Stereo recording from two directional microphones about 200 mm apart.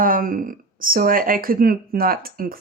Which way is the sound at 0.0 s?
45° right (ahead or behind).